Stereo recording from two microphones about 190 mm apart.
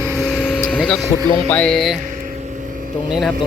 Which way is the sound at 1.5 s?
5° left (ahead or behind).